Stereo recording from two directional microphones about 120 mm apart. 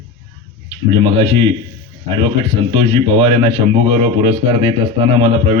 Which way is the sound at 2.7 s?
50° right (ahead or behind).